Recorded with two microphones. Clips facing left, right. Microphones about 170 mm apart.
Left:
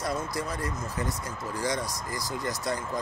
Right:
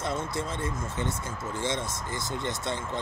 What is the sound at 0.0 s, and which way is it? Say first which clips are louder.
Speech: even; 25° right (ahead or behind).